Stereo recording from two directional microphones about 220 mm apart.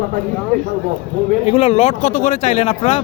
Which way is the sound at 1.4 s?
25° left (ahead or behind).